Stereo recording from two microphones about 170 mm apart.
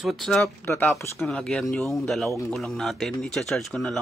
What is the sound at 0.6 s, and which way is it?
Speech, 15° left (ahead or behind).